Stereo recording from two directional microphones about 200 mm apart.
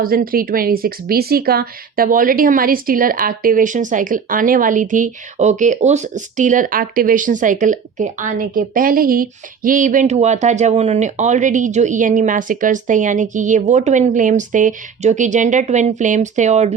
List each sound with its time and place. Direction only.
0.0 s a woman's voice: 45° right (ahead or behind)